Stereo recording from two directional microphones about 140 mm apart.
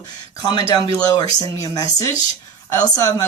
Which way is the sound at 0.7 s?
25° left (ahead or behind).